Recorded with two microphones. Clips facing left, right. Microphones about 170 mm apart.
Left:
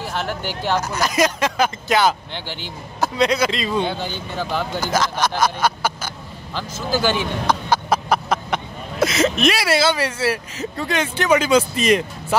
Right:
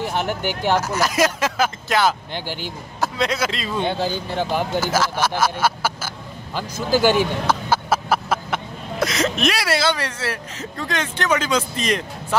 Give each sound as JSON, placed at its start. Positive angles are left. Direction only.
{"t": 0.0, "sound": "a man's voice", "side_deg": -15}
{"t": 4.4, "sound": "speech", "side_deg": -15}
{"t": 7.4, "sound": "a sound", "side_deg": -5}
{"t": 9.0, "sound": "speech", "side_deg": 5}